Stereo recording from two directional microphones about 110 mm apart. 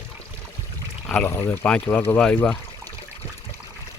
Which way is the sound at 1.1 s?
10° left (ahead or behind).